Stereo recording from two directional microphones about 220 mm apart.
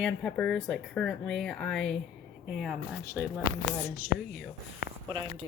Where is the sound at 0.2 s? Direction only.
5° left (ahead or behind).